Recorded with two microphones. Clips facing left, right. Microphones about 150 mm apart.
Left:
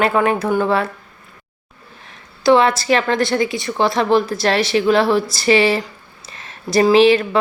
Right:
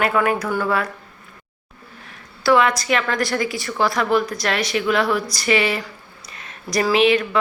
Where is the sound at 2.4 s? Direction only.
30° left (ahead or behind).